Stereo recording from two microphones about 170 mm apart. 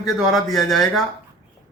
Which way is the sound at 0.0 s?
Centre (ahead or behind).